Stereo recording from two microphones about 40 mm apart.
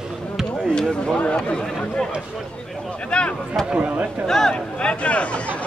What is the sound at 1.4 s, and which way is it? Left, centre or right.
Speech, centre.